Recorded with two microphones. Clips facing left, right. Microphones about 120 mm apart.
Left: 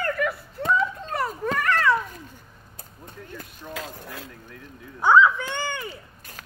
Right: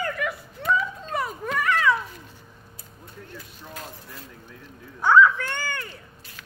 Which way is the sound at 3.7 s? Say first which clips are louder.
Left 5 dB; 90° left.